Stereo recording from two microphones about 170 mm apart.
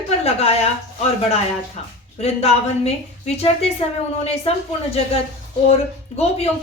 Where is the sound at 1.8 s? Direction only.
40° left (ahead or behind).